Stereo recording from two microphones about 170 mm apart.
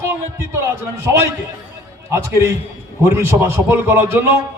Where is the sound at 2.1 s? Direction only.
15° right (ahead or behind).